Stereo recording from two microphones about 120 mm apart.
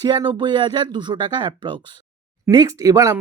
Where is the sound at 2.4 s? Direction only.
30° right (ahead or behind).